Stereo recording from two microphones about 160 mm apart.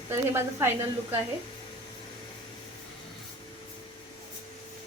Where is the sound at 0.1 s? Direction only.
15° right (ahead or behind).